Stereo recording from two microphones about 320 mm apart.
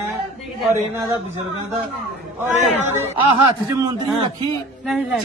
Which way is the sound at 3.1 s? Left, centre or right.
Centre.